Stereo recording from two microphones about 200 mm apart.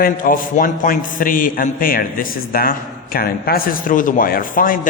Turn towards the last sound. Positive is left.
turn(degrees=45)  # may be behind; listen again after turning